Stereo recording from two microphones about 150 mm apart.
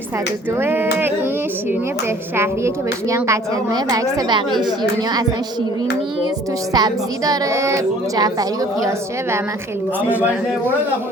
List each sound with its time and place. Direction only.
0.6 s music: 15° right (ahead or behind)
2.3 s a woman's voice: 15° right (ahead or behind)
6.7 s a woman's voice: 25° right (ahead or behind)